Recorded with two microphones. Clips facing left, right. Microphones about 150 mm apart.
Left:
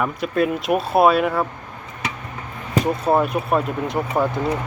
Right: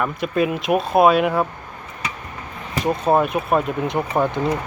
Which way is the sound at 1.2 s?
10° right (ahead or behind).